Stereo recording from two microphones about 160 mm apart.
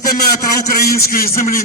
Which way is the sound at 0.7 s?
70° left (ahead or behind).